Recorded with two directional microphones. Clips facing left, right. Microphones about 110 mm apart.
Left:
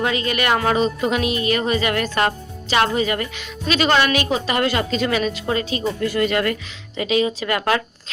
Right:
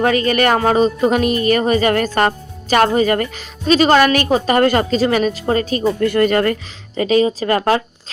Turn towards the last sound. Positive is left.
turn(degrees=-35)  # may be behind; listen again after turning